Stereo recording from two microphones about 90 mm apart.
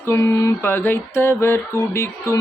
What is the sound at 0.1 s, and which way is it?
Mantra, 35° left (ahead or behind).